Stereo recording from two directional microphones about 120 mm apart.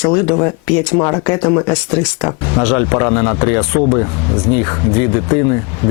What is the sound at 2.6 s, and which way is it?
Speech, 15° left (ahead or behind).